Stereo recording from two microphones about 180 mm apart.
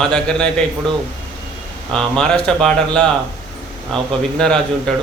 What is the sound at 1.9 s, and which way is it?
A man's voice, 5° left (ahead or behind).